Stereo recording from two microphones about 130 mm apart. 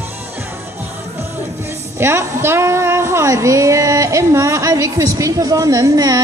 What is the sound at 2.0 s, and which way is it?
Speech, 20° right (ahead or behind).